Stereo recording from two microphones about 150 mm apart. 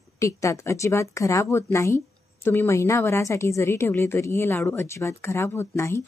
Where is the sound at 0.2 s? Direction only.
20° left (ahead or behind).